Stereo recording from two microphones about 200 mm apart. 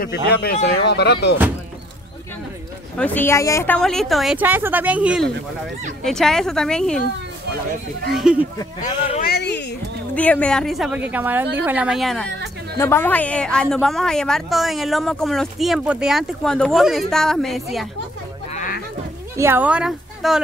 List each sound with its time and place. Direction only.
0.0 s speech: 50° left (ahead or behind)
3.0 s a woman's voice: 10° left (ahead or behind)
8.1 s a woman's voice: 5° right (ahead or behind)
8.5 s speech: 25° left (ahead or behind)
9.2 s a sound: 55° left (ahead or behind)
10.1 s a woman's voice: 5° left (ahead or behind)
12.7 s a woman's voice: 10° left (ahead or behind)
18.5 s a sound: 40° left (ahead or behind)
19.3 s speech: 10° right (ahead or behind)